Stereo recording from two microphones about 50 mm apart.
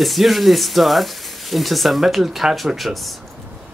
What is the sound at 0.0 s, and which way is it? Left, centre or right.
Speech, centre.